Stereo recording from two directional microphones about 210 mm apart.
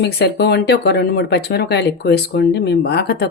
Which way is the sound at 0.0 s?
50° left (ahead or behind).